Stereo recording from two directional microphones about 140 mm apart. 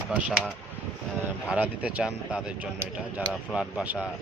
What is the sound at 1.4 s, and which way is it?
Speech, 10° right (ahead or behind).